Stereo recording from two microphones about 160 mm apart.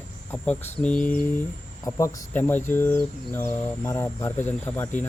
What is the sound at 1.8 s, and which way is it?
Speech, 20° left (ahead or behind).